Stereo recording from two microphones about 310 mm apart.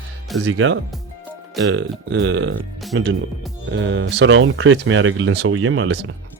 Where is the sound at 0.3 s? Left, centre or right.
Right.